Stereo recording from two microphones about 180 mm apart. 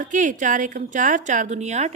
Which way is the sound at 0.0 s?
45° right (ahead or behind).